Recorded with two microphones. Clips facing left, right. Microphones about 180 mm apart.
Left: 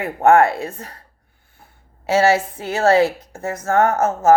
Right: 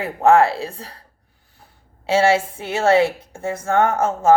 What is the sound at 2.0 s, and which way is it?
Speech, 25° right (ahead or behind).